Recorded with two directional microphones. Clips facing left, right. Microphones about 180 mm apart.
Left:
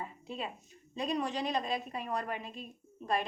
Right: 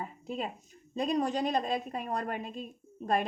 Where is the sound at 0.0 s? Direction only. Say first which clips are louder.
Right 4 dB; 45° right (ahead or behind).